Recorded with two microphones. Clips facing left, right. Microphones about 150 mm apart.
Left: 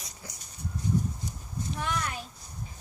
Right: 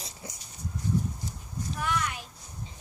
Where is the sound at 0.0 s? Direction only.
25° right (ahead or behind).